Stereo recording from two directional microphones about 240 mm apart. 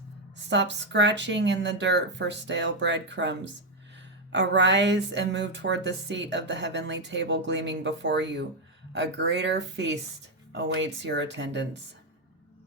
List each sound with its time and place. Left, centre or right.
0.3 s speech: right